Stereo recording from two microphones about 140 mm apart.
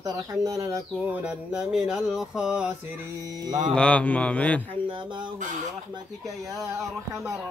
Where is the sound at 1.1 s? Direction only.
10° right (ahead or behind).